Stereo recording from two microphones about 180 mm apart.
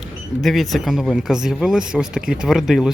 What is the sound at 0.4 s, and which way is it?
A man's voice, centre (ahead or behind).